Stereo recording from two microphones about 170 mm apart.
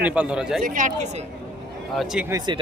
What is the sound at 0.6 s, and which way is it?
Speech, 50° right (ahead or behind).